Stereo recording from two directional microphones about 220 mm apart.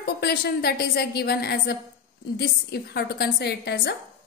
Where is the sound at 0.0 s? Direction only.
45° left (ahead or behind).